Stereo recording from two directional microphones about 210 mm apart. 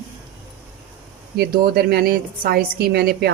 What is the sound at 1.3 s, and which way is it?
Speech, 50° right (ahead or behind).